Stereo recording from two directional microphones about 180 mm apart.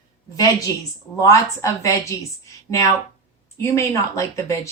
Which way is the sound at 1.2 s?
15° left (ahead or behind).